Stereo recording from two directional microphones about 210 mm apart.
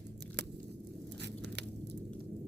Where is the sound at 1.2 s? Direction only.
55° right (ahead or behind).